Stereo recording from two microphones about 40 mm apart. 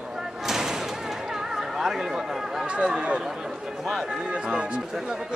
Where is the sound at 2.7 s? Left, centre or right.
Right.